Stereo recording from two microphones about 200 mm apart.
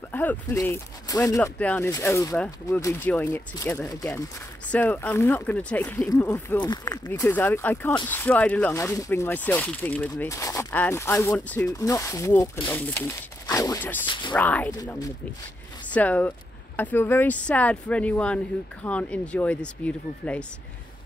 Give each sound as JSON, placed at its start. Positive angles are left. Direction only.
{"t": 0.1, "sound": "speech", "side_deg": 10}
{"t": 6.7, "sound": "speech", "side_deg": 20}
{"t": 14.0, "sound": "speech", "side_deg": 25}
{"t": 14.3, "sound": "speech", "side_deg": 5}
{"t": 14.8, "sound": "speech", "side_deg": 15}